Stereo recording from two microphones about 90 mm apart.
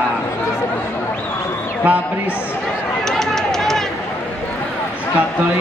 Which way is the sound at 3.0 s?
5° left (ahead or behind).